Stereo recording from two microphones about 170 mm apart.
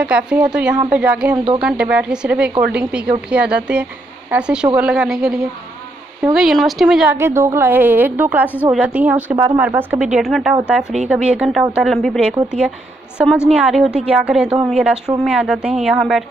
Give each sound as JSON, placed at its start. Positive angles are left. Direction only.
{"t": 0.0, "sound": "a woman's voice", "side_deg": -5}
{"t": 1.3, "sound": "speech", "side_deg": -30}
{"t": 1.6, "sound": "a woman's voice", "side_deg": -5}
{"t": 7.2, "sound": "a woman's voice", "side_deg": -15}
{"t": 13.5, "sound": "a woman's voice", "side_deg": -5}